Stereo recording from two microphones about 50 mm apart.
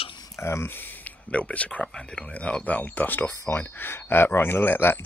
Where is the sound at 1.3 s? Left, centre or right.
Left.